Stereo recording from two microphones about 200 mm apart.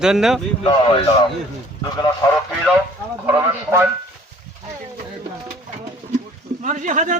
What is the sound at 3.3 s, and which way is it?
Speech, 15° right (ahead or behind).